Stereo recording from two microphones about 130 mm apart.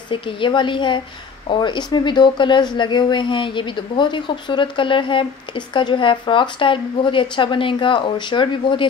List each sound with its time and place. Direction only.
0.1 s speech: 40° left (ahead or behind)